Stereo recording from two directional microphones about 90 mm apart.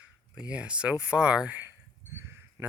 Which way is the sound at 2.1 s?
25° right (ahead or behind).